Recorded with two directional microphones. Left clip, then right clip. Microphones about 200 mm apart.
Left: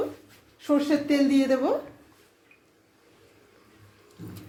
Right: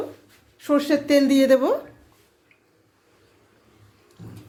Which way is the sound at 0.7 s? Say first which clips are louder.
Right 5 dB; 40° right (ahead or behind).